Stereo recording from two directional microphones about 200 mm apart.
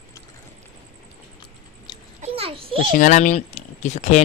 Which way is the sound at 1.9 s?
20° left (ahead or behind).